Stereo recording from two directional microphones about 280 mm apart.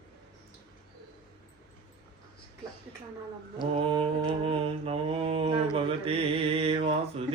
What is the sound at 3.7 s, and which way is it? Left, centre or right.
Mantra, centre.